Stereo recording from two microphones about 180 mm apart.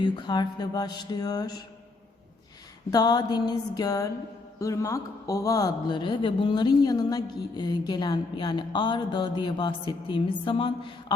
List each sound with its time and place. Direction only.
0.0 s speech: 25° left (ahead or behind)
2.9 s speech: 20° left (ahead or behind)